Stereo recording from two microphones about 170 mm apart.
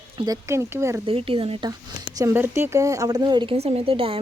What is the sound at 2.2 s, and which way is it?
Speech, 15° right (ahead or behind).